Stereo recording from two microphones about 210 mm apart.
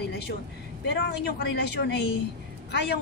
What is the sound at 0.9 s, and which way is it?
Speech, 50° left (ahead or behind).